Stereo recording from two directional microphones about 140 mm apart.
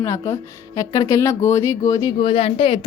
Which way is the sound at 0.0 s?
20° left (ahead or behind).